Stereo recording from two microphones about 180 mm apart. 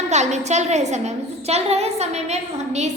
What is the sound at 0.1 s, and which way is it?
A woman's voice, 40° right (ahead or behind).